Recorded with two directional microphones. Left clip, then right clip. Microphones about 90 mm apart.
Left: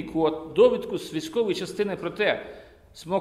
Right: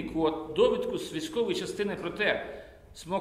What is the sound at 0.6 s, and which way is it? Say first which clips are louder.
A man's voice: left 6 dB; 60° left (ahead or behind).